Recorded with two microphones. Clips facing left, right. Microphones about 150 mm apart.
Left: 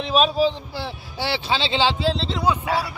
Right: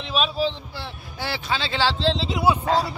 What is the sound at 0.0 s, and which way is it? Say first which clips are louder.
A man's voice: left 5 dB; 40° left (ahead or behind).